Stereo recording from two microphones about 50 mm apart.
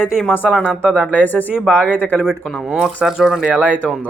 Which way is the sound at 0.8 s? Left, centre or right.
Centre.